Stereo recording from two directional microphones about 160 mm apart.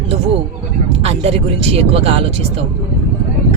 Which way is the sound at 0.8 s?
40° right (ahead or behind).